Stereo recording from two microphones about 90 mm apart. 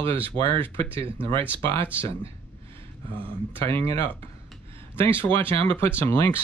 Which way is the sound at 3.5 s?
25° left (ahead or behind).